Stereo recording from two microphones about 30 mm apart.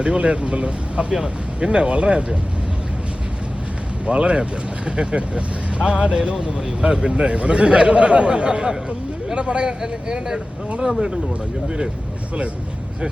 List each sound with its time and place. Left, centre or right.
0.0 s a man's voice: right
4.0 s a man's voice: right
9.8 s speech: right